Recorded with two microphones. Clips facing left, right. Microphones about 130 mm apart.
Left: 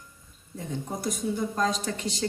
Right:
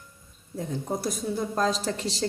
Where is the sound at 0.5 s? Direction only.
35° right (ahead or behind).